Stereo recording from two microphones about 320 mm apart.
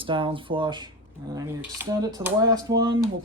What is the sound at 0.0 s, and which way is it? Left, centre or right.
Speech, centre.